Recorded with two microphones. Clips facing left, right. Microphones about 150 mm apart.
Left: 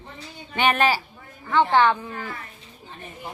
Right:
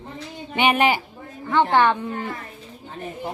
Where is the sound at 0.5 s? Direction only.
15° right (ahead or behind).